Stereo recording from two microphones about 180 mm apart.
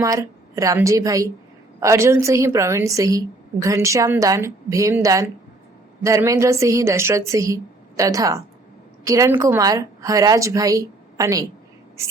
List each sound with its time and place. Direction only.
0.0 s a woman's voice: 20° right (ahead or behind)